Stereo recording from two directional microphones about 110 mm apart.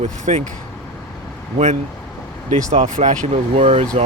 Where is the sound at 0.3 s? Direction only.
90° right.